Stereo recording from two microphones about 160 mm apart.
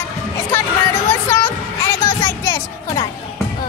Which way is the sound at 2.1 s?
20° left (ahead or behind).